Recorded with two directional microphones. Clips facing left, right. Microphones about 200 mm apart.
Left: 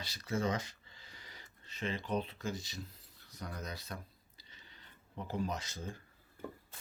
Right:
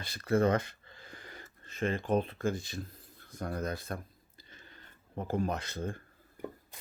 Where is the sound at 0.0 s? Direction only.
55° right (ahead or behind).